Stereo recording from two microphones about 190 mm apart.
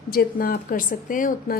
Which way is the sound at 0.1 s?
50° left (ahead or behind).